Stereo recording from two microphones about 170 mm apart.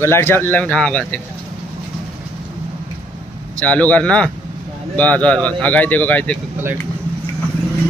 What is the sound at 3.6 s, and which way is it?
Speech, 10° left (ahead or behind).